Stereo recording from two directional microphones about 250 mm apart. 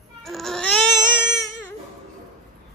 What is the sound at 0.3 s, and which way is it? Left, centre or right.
Baby cry, centre.